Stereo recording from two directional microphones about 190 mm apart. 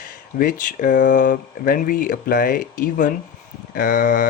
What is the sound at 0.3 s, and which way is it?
Speech, 45° left (ahead or behind).